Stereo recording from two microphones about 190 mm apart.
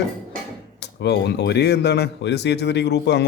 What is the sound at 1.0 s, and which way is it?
Speech, 60° left (ahead or behind).